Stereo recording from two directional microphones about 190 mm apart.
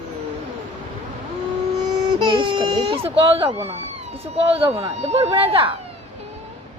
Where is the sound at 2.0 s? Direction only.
25° right (ahead or behind).